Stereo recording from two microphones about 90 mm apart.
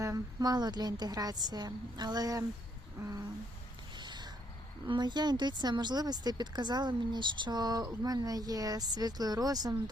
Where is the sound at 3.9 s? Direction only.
55° right (ahead or behind).